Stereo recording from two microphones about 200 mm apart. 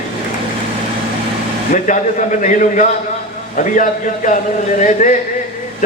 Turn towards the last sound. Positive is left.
turn(degrees=40)  # may be behind; listen again after turning